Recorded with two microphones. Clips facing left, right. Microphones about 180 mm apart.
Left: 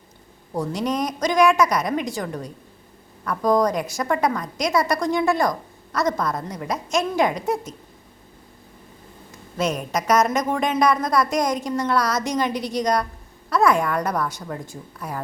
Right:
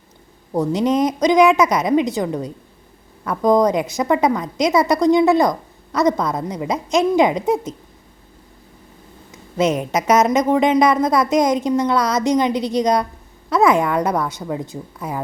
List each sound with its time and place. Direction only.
0.5 s a woman's voice: 20° right (ahead or behind)
9.9 s a woman's voice: 20° right (ahead or behind)